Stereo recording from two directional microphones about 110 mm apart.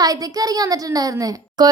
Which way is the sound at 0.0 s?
35° right (ahead or behind).